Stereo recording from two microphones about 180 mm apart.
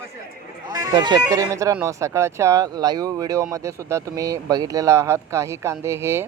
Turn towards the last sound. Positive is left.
turn(degrees=-15)  # may be behind; listen again after turning